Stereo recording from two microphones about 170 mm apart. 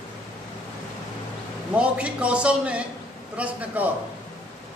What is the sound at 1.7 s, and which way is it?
A man's voice, 5° right (ahead or behind).